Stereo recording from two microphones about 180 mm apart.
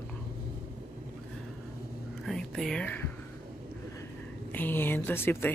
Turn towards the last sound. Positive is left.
turn(degrees=10)  # may be behind; listen again after turning